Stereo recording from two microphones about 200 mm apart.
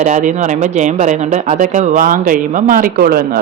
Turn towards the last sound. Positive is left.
turn(degrees=-50)  # may be behind; listen again after turning